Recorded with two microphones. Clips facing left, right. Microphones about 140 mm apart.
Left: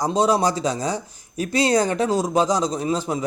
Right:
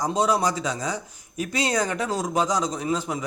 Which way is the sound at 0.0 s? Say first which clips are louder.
Left 3 dB; 30° left (ahead or behind).